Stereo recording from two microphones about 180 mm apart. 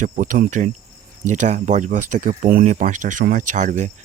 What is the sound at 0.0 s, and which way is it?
Speech, 45° right (ahead or behind).